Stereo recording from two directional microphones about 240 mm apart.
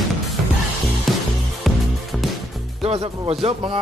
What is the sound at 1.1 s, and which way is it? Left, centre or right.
Music, centre.